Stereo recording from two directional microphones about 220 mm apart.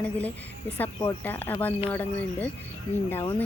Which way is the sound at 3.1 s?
20° left (ahead or behind).